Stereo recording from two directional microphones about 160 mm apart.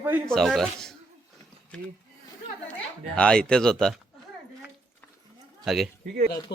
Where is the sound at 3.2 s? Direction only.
5° left (ahead or behind).